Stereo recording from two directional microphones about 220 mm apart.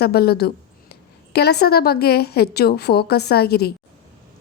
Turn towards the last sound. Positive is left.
turn(degrees=45)  # may be behind; listen again after turning